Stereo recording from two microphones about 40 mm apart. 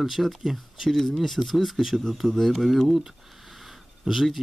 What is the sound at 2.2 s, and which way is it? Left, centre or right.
Speech, centre.